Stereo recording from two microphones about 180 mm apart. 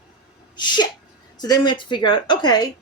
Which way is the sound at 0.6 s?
25° left (ahead or behind).